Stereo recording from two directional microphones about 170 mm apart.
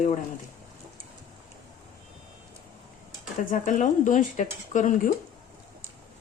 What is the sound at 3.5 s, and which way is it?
Speech, 50° left (ahead or behind).